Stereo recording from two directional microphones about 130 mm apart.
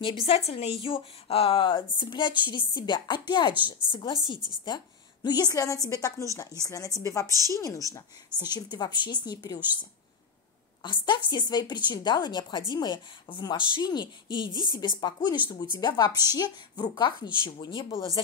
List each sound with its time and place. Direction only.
0.0 s a woman's voice: 45° left (ahead or behind); by 7.2 s 25° left (ahead or behind)
7.2 s a woman's voice: 25° right (ahead or behind)
7.5 s a woman's voice: 25° left (ahead or behind)
10.8 s a woman's voice: 35° left (ahead or behind)
16.1 s a woman's voice: 20° right (ahead or behind)
16.3 s a woman's voice: 35° left (ahead or behind)